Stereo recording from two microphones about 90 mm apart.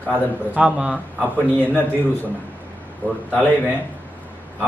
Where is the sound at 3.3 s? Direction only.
15° left (ahead or behind).